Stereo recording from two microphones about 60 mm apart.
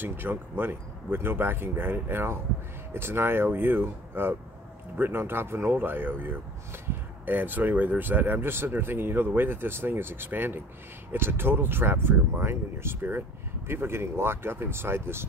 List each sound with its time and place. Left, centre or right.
0.0 s speech: right